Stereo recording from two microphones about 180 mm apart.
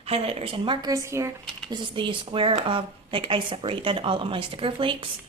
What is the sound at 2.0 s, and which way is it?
Speech, 30° right (ahead or behind).